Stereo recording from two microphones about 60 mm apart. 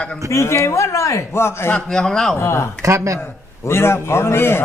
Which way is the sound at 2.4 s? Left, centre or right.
Left.